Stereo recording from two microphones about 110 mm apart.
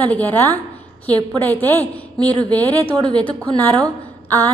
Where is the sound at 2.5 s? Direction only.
15° left (ahead or behind).